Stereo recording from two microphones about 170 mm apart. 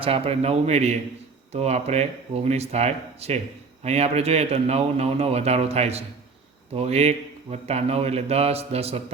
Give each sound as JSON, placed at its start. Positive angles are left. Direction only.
{"t": 0.0, "sound": "a man's voice", "side_deg": -35}